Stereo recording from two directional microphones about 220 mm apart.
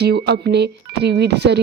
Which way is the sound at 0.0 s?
50° right (ahead or behind).